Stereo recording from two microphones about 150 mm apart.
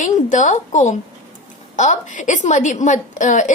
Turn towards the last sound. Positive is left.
turn(degrees=55)  # may be behind; listen again after turning